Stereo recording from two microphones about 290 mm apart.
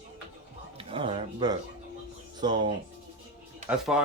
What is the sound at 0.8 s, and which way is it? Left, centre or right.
Speech, centre.